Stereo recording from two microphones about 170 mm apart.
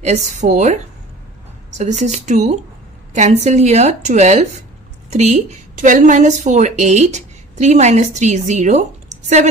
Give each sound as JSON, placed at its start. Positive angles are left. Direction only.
{"t": 0.0, "sound": "speech", "side_deg": -40}